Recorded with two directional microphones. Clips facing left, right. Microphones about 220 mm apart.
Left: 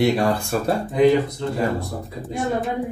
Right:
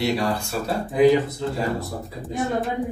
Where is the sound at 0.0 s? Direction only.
50° left (ahead or behind).